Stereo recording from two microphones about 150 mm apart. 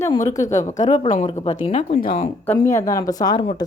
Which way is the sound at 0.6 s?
55° left (ahead or behind).